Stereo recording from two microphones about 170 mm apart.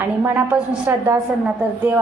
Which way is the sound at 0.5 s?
5° right (ahead or behind).